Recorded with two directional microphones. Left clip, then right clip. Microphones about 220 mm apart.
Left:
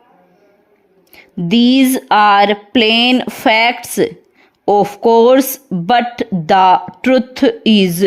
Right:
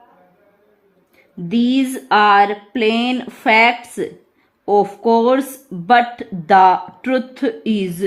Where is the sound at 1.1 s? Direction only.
40° left (ahead or behind).